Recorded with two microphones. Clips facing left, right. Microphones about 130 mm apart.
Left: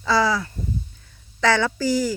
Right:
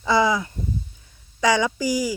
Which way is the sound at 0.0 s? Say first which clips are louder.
Right 1 dB; 20° right (ahead or behind).